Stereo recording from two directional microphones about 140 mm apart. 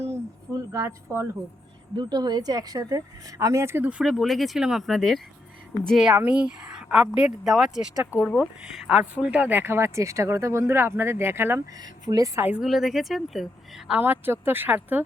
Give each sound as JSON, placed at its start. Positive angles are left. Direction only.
{"t": 0.5, "sound": "speech", "side_deg": -20}
{"t": 2.0, "sound": "a woman's voice", "side_deg": -30}
{"t": 11.8, "sound": "speech", "side_deg": -25}
{"t": 12.6, "sound": "a woman's voice", "side_deg": 0}
{"t": 14.0, "sound": "speech", "side_deg": -15}